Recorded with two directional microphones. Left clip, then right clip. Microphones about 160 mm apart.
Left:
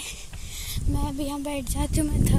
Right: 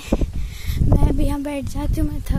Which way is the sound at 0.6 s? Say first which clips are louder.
Right 8 dB; 40° right (ahead or behind).